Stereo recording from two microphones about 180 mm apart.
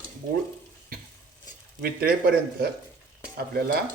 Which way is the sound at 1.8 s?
55° right (ahead or behind).